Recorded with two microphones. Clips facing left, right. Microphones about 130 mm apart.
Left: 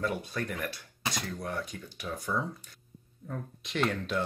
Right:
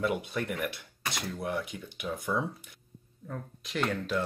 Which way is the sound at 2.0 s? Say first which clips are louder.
Right 2 dB; 5° right (ahead or behind).